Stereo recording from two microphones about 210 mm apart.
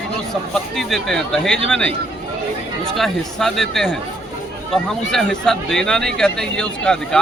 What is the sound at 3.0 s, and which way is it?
Speech, centre (ahead or behind).